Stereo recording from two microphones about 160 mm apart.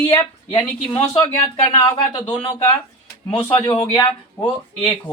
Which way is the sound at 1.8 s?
30° left (ahead or behind).